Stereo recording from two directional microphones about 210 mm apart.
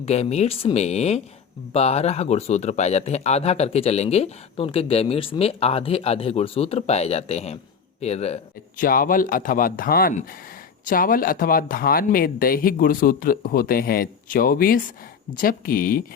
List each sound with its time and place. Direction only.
0.0 s a man's voice: 30° left (ahead or behind)
8.8 s speech: 40° left (ahead or behind)